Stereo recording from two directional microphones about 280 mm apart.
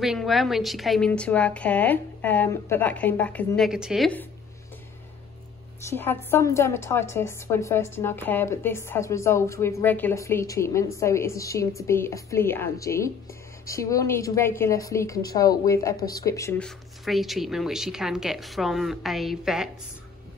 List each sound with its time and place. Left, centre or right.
0.0 s a woman's voice: centre
5.9 s a woman's voice: centre